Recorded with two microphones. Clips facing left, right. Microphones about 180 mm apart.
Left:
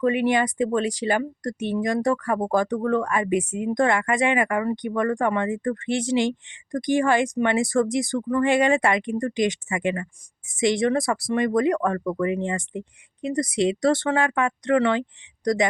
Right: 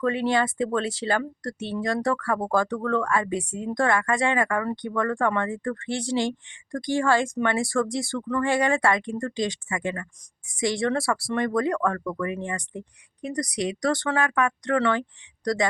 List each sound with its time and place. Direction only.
0.0 s speech: 15° left (ahead or behind)